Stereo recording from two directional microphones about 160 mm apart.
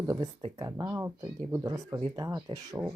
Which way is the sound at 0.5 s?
25° right (ahead or behind).